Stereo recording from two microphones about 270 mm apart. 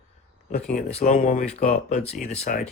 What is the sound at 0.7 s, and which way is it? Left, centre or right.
Speech, left.